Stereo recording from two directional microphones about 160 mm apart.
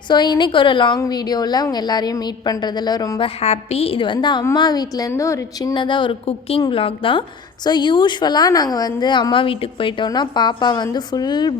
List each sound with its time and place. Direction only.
0.1 s a woman's voice: 30° left (ahead or behind)
3.2 s a woman's voice: 40° left (ahead or behind)